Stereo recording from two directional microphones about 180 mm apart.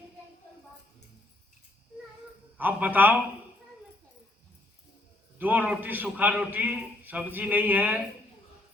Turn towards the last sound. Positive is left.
turn(degrees=-10)  # may be behind; listen again after turning